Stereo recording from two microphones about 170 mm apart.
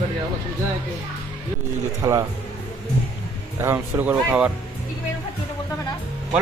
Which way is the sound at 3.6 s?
15° right (ahead or behind).